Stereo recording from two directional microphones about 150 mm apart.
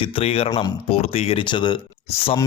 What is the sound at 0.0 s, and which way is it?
Speech, 40° left (ahead or behind).